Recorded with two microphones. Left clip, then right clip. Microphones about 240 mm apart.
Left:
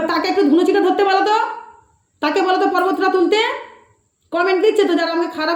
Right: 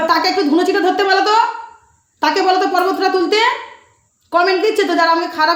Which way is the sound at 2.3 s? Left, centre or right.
Right.